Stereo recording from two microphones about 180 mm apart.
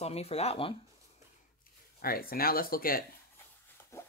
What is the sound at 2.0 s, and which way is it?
Speech, 55° left (ahead or behind).